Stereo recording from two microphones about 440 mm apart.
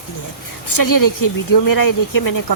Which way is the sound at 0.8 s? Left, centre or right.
Left.